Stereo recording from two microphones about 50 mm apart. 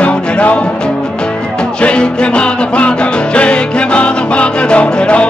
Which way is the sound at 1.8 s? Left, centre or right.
Left.